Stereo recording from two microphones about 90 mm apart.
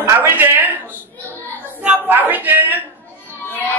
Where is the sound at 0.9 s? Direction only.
20° left (ahead or behind).